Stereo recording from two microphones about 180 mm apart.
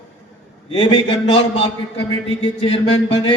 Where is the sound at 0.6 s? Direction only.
30° left (ahead or behind).